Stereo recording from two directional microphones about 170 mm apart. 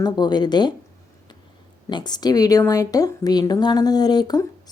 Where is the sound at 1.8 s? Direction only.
25° left (ahead or behind).